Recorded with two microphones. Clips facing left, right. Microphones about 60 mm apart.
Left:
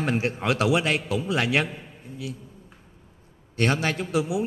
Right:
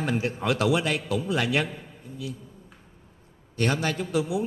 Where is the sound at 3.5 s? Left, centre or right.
Left.